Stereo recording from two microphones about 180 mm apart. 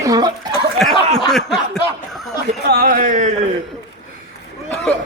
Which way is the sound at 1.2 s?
Centre (ahead or behind).